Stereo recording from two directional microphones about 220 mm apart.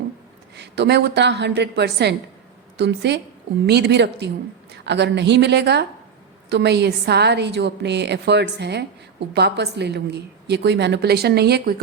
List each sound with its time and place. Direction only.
0.5 s a woman's voice: 50° right (ahead or behind)